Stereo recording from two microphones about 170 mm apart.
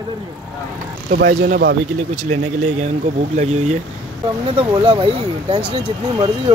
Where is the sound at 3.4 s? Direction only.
40° right (ahead or behind).